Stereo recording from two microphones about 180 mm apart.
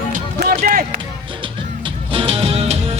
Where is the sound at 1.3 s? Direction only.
25° right (ahead or behind).